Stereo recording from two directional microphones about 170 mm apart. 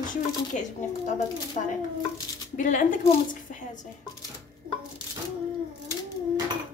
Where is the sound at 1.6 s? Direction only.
40° left (ahead or behind).